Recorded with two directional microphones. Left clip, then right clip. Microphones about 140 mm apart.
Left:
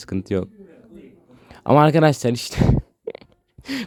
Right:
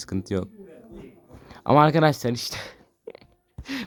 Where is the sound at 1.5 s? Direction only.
20° left (ahead or behind).